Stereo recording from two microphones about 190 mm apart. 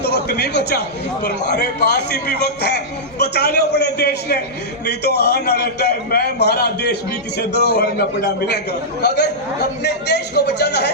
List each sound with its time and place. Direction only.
0.0 s a man's voice: 60° left (ahead or behind)